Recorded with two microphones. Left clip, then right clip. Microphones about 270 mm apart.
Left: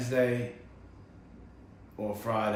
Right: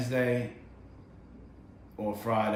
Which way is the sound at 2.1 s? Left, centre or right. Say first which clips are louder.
Right 2 dB; centre.